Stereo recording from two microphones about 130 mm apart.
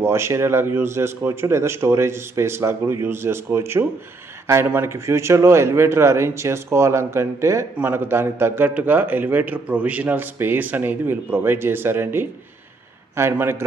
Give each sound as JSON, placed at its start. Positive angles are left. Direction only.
{"t": 0.0, "sound": "a man's voice", "side_deg": -20}